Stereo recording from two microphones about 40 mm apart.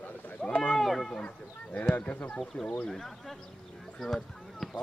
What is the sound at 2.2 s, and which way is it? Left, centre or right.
Speech, left.